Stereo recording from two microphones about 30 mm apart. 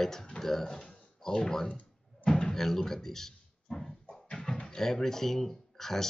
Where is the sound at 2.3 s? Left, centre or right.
Left.